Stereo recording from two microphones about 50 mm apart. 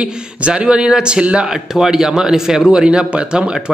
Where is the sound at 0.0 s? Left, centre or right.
Right.